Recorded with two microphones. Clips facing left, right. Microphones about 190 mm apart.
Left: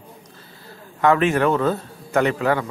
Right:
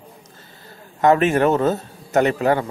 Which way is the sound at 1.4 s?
25° right (ahead or behind).